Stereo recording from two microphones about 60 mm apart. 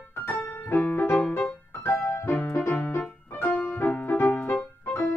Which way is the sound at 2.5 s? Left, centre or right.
Left.